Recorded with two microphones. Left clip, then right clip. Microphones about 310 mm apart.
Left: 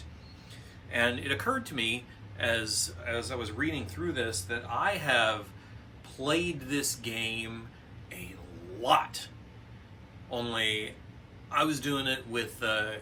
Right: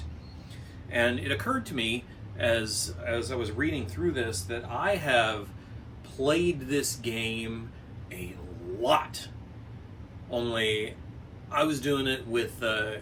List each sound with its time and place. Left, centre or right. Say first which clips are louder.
0.9 s speech: right 2 dB; centre
8.8 s speech: right 1 dB; centre